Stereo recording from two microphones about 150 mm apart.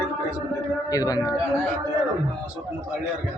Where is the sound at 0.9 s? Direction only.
25° left (ahead or behind).